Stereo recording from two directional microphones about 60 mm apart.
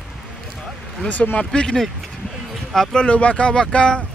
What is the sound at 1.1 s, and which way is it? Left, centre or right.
Speech, left.